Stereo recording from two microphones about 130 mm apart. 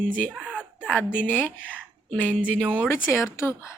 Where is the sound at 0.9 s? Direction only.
15° left (ahead or behind).